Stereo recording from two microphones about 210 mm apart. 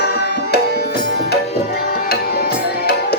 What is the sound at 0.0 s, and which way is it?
Tabla, 50° left (ahead or behind).